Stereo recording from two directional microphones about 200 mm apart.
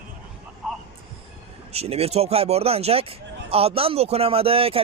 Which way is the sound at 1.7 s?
30° right (ahead or behind).